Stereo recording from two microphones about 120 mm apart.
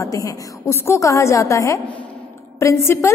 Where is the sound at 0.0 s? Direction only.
25° left (ahead or behind).